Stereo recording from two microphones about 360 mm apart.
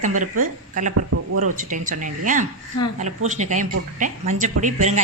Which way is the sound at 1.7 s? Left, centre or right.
Right.